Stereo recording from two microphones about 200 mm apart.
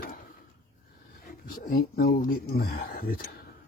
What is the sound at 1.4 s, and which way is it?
Speech, 50° left (ahead or behind).